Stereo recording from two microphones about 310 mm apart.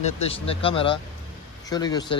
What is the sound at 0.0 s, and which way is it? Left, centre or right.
Speech, centre.